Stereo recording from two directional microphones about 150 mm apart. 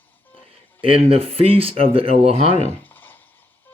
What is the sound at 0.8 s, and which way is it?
Speech, 40° right (ahead or behind).